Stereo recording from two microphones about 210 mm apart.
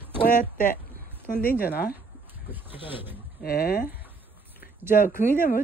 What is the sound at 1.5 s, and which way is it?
Speech, 45° left (ahead or behind).